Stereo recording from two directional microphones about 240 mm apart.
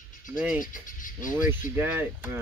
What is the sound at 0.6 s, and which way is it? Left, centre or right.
Speech, left.